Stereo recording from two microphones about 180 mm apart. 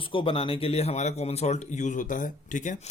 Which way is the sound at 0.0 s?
30° left (ahead or behind).